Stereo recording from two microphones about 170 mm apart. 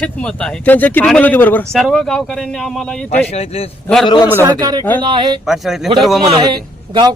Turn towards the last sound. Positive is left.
turn(degrees=-25)  # may be behind; listen again after turning